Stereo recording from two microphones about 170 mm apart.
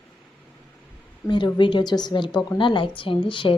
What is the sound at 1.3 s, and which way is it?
A woman's voice, 25° left (ahead or behind).